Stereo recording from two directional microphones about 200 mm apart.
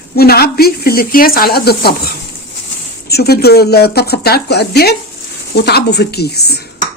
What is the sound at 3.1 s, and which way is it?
Speech, 50° left (ahead or behind).